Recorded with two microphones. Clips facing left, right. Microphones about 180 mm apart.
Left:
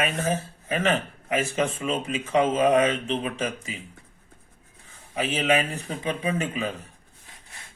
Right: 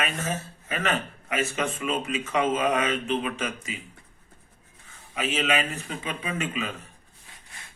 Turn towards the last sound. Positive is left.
turn(degrees=35)  # may be behind; listen again after turning